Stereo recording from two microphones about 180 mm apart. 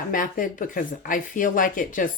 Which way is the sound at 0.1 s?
50° left (ahead or behind).